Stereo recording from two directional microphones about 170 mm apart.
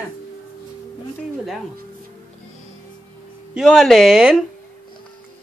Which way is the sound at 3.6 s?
Centre (ahead or behind).